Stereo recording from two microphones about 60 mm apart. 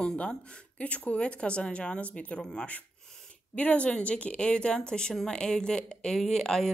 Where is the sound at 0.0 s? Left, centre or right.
Centre.